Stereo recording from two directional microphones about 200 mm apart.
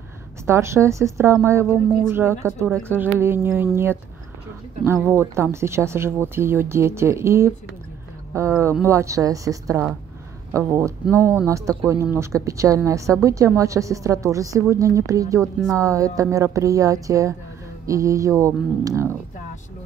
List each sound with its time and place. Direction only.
0.5 s speech: 15° right (ahead or behind)
10.8 s speech: 10° left (ahead or behind)
11.4 s speech: 15° right (ahead or behind)